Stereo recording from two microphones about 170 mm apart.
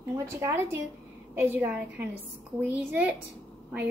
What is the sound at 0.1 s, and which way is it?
A woman's voice, 20° right (ahead or behind).